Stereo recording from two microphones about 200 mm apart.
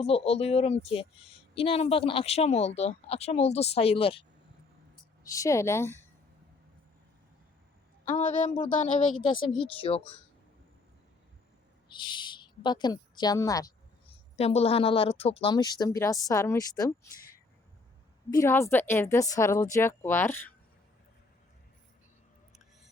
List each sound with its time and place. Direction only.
0.0 s speech: 30° left (ahead or behind)
5.2 s a woman's voice: 15° left (ahead or behind)
8.1 s speech: 40° left (ahead or behind)
9.5 s speech: 25° left (ahead or behind)
11.9 s a woman's voice: 25° left (ahead or behind)
14.3 s a woman's voice: 30° left (ahead or behind); by 20.5 s 10° left (ahead or behind)